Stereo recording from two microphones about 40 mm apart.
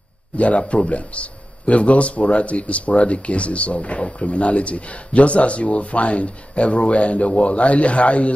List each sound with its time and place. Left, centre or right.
0.4 s speech: left